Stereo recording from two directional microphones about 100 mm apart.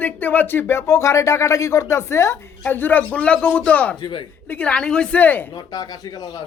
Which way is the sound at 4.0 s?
50° left (ahead or behind).